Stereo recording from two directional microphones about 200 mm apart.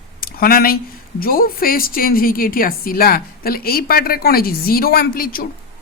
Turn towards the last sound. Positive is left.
turn(degrees=45)  # may be behind; listen again after turning